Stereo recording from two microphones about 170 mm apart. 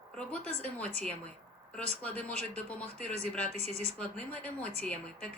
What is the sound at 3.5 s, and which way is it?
Speech, 40° right (ahead or behind).